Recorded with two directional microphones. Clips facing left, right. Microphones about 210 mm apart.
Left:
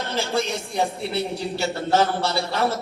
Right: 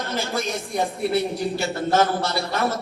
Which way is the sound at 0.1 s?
30° left (ahead or behind).